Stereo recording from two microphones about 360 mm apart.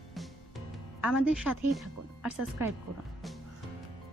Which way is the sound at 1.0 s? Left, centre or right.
Centre.